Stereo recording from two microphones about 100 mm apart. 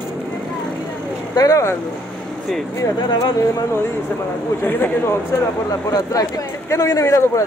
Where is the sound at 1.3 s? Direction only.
35° left (ahead or behind).